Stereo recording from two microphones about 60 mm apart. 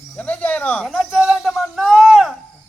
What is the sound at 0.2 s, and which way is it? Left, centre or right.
Snake, left.